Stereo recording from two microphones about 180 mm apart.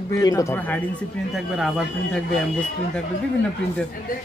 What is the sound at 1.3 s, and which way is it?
Speech, centre (ahead or behind).